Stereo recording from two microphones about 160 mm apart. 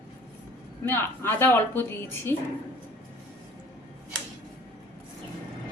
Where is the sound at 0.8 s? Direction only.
15° left (ahead or behind).